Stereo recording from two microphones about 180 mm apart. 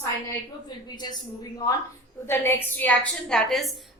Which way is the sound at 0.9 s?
20° left (ahead or behind).